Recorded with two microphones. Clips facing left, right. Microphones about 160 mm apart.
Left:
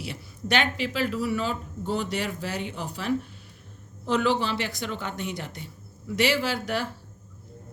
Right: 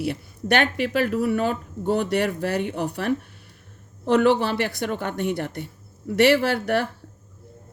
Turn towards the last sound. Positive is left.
turn(degrees=-60)  # may be behind; listen again after turning